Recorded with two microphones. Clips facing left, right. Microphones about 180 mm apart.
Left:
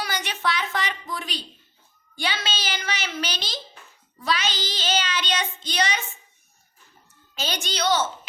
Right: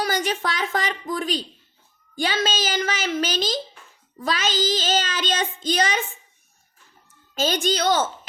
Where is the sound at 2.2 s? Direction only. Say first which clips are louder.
Right 6 dB; 45° right (ahead or behind).